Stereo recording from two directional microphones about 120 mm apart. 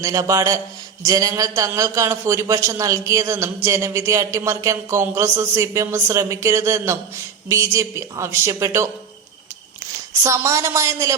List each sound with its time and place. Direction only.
0.0 s a man's voice: 30° right (ahead or behind)
10.2 s a man's voice: 25° right (ahead or behind)